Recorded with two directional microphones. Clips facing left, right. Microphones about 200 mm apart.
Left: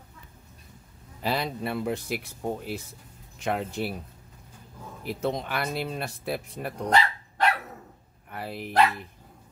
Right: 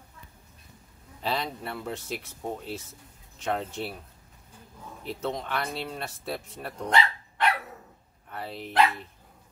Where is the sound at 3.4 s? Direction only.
10° left (ahead or behind).